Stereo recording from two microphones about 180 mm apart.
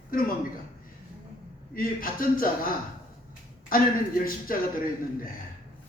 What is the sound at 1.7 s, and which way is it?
Speech, 50° left (ahead or behind).